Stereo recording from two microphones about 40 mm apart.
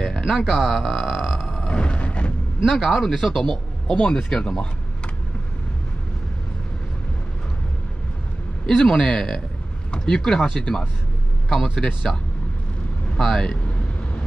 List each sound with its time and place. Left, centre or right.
0.5 s speech: centre
1.3 s a sound: centre
1.7 s music: left
2.6 s speech: centre
3.9 s speech: left
8.6 s speech: centre
13.2 s speech: centre